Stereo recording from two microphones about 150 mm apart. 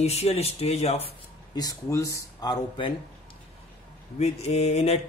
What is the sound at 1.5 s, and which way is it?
Speech, 25° left (ahead or behind).